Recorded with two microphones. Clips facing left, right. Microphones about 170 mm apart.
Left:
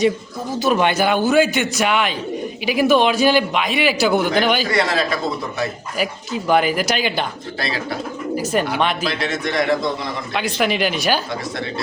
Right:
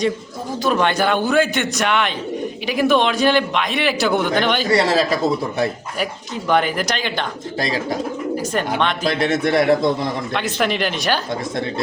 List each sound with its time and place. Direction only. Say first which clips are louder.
0.6 s a man's voice: left 1 dB; 10° left (ahead or behind)
4.7 s speech: right 3 dB; 35° right (ahead or behind)
6.0 s a man's voice: left 3 dB; 5° left (ahead or behind)
7.6 s speech: right 3 dB; 40° right (ahead or behind)
9.0 s a man's voice: right 5 dB; 55° right (ahead or behind)
10.3 s a man's voice: left 3 dB; 5° left (ahead or behind)